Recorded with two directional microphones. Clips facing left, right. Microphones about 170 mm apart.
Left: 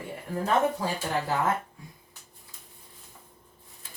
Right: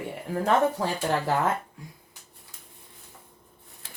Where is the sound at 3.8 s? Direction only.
75° right (ahead or behind).